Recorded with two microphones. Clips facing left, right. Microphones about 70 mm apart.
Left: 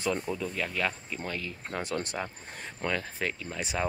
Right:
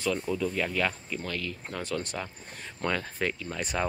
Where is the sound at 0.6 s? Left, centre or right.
Centre.